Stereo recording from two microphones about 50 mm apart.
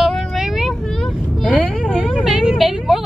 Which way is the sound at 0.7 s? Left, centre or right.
Centre.